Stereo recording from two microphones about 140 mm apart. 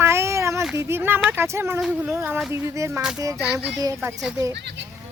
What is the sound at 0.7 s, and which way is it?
Speech, 15° right (ahead or behind).